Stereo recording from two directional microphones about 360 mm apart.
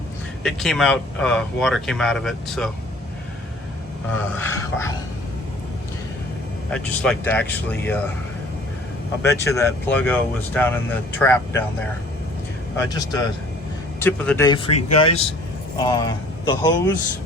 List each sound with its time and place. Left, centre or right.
0.4 s speech: centre
4.1 s speech: centre
6.7 s speech: centre
9.2 s speech: centre
12.9 s speech: centre
14.8 s speech: left
15.8 s speech: centre